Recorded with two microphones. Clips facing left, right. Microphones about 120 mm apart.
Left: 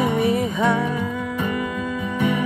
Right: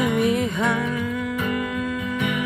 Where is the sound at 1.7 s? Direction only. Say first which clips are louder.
Even; 5° right (ahead or behind).